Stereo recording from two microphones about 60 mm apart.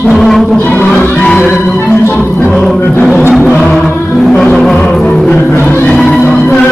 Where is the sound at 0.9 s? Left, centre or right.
Left.